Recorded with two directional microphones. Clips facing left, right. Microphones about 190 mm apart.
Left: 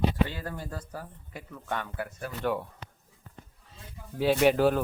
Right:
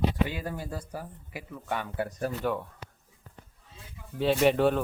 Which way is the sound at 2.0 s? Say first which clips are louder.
Right 5 dB; 35° right (ahead or behind).